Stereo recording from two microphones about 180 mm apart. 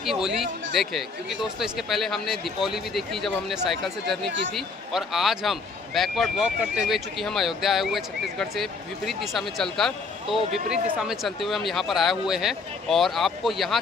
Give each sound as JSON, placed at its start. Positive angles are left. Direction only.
{"t": 0.0, "sound": "a man's voice", "side_deg": 0}
{"t": 4.3, "sound": "speech", "side_deg": -90}
{"t": 4.5, "sound": "a man's voice", "side_deg": 0}